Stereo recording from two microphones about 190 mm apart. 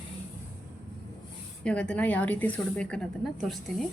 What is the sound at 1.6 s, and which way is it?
Speech, 5° left (ahead or behind).